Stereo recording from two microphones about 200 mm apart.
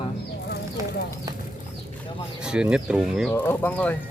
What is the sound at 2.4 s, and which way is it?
Speech, 5° right (ahead or behind).